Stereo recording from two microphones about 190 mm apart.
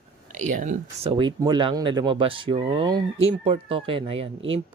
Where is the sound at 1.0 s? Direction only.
25° right (ahead or behind).